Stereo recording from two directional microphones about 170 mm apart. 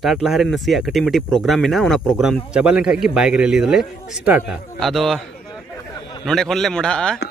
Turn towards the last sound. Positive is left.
turn(degrees=5)  # may be behind; listen again after turning